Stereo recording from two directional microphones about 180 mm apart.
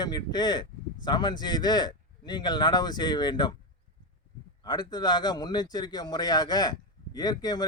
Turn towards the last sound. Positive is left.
turn(degrees=20)  # may be behind; listen again after turning